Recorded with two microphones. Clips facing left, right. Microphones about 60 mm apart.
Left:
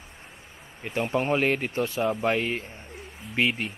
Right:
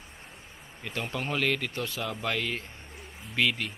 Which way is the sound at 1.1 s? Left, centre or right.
Left.